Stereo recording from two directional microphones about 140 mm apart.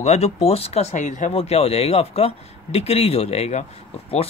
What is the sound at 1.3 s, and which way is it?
Speech, 50° left (ahead or behind).